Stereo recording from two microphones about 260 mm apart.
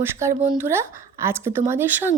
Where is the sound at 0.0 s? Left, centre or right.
Centre.